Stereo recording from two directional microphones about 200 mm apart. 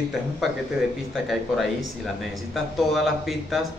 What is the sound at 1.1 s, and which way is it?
Speech, centre (ahead or behind).